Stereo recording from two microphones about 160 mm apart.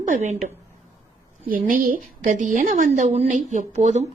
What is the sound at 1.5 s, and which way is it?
A woman's voice, 60° right (ahead or behind).